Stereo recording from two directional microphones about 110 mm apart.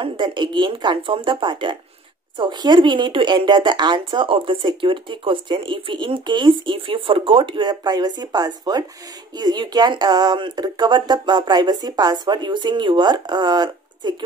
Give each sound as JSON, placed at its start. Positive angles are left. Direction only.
{"t": 0.0, "sound": "speech", "side_deg": -45}